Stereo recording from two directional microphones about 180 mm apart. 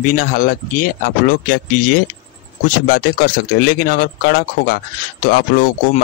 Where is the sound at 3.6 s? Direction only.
55° left (ahead or behind).